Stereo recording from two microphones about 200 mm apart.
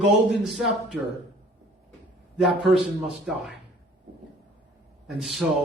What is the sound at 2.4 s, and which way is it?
A man's voice, centre (ahead or behind).